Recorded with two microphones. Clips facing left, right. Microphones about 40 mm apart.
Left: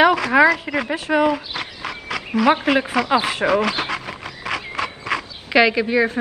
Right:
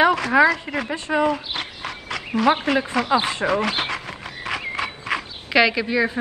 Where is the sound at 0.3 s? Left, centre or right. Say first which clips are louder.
Left 1 dB; left.